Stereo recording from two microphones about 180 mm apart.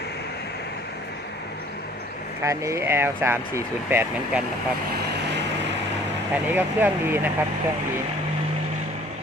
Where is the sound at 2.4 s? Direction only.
15° right (ahead or behind).